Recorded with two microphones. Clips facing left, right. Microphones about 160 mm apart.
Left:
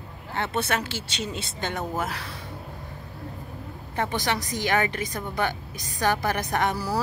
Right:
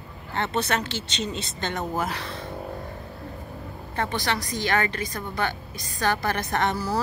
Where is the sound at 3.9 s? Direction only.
15° left (ahead or behind).